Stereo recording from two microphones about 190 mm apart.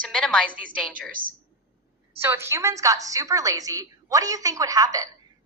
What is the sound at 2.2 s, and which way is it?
A woman's voice, 15° right (ahead or behind).